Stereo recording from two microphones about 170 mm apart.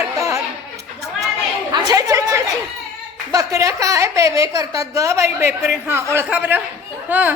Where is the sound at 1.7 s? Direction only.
20° right (ahead or behind).